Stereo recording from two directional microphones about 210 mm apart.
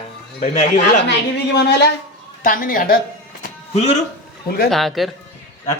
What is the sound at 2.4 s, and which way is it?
Speech, 40° left (ahead or behind).